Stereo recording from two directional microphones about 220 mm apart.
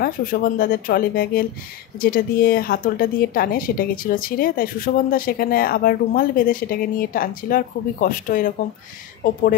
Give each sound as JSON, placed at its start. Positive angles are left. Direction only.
{"t": 0.0, "sound": "speech", "side_deg": 40}